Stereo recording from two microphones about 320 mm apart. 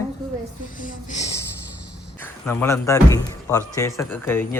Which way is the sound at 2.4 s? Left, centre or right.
Centre.